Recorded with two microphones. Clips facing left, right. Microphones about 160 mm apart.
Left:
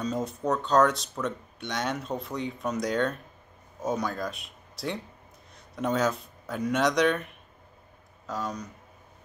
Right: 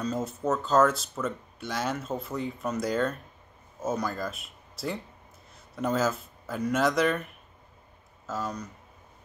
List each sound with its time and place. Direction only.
0.0 s speech: centre (ahead or behind)